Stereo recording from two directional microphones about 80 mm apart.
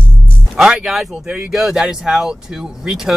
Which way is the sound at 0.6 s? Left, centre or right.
Centre.